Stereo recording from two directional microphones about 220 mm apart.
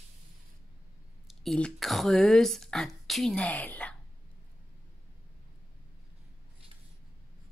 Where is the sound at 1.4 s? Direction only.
Centre (ahead or behind).